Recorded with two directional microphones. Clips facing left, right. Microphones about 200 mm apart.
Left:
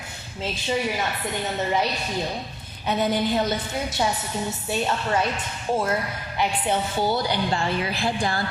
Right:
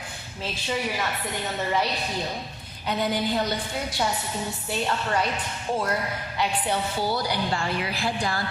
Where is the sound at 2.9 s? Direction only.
25° left (ahead or behind).